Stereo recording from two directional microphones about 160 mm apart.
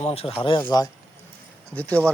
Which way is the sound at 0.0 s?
40° left (ahead or behind).